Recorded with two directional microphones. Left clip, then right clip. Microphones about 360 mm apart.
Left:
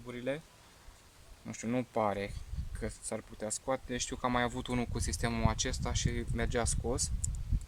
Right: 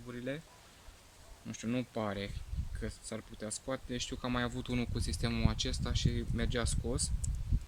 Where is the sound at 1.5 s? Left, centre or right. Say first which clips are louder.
Left 4 dB; centre.